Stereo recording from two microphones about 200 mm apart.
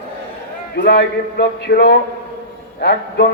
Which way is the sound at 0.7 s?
55° left (ahead or behind).